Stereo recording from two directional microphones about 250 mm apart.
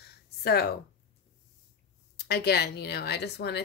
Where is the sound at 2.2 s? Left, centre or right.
Left.